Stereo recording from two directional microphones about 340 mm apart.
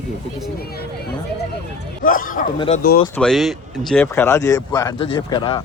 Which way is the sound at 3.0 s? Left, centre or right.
Centre.